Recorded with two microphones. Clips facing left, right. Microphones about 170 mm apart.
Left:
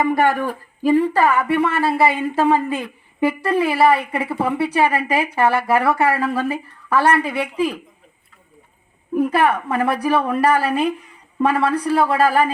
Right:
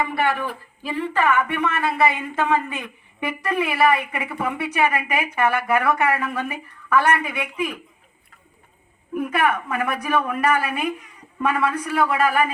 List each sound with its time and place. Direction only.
0.0 s speech: 40° left (ahead or behind)
9.1 s speech: 30° left (ahead or behind)